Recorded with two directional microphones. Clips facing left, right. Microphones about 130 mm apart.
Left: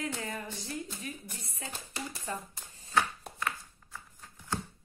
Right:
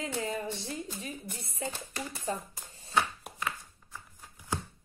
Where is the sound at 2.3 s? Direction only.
25° right (ahead or behind).